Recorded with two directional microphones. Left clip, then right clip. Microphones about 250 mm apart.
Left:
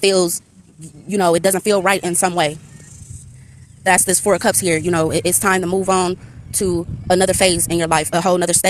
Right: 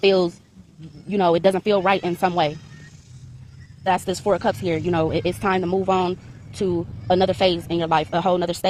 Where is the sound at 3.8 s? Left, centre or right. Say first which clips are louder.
Left 6 dB; left.